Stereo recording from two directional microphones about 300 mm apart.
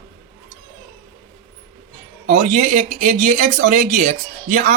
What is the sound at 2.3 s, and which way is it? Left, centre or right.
Speech, right.